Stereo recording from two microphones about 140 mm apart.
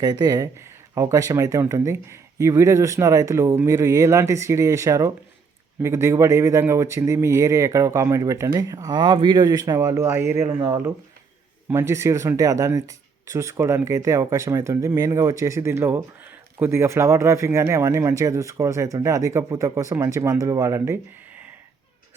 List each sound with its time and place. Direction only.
0.0 s speech: 30° right (ahead or behind)